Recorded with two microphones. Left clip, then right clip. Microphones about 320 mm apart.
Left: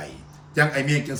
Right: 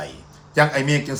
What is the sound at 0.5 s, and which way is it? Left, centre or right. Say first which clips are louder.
Speech: right 3 dB; centre.